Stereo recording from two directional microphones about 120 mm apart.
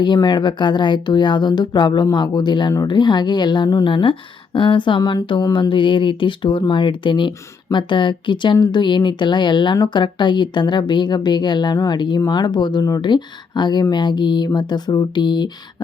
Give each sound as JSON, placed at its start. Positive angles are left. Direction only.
{"t": 0.0, "sound": "speech", "side_deg": 40}